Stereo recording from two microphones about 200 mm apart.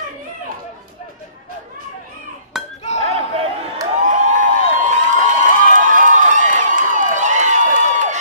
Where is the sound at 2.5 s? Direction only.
Centre (ahead or behind).